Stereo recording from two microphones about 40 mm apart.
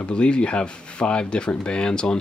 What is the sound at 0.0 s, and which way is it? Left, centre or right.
Speech, left.